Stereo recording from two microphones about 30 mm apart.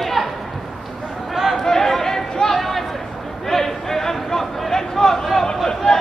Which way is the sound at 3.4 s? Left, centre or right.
Centre.